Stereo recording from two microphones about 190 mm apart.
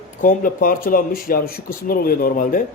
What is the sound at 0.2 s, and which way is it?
Speech, 45° left (ahead or behind).